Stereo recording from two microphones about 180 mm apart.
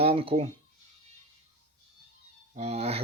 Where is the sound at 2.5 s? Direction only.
35° right (ahead or behind).